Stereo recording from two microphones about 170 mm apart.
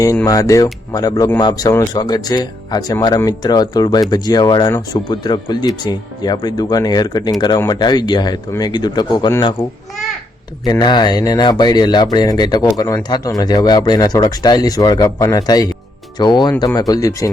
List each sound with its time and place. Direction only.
0.3 s speech: 20° left (ahead or behind)
10.6 s speech: 25° left (ahead or behind)